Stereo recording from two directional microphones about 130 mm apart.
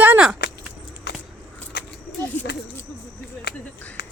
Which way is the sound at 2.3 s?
15° left (ahead or behind).